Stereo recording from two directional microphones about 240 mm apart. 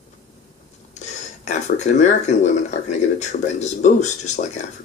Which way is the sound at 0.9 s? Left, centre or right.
Left.